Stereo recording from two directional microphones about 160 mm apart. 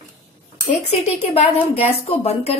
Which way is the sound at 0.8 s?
40° left (ahead or behind).